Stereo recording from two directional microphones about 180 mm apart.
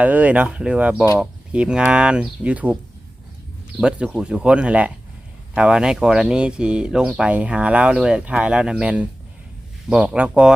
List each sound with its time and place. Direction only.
0.0 s speech: 10° right (ahead or behind)